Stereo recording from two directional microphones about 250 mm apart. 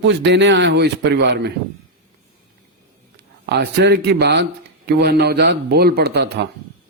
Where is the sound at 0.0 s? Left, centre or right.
Right.